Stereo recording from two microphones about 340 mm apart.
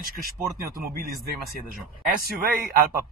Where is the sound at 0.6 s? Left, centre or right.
Right.